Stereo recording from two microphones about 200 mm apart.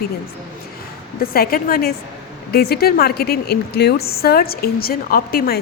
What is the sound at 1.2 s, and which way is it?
A woman's voice, 45° left (ahead or behind).